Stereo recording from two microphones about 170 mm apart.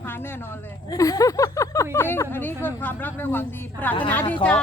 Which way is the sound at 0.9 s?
20° left (ahead or behind).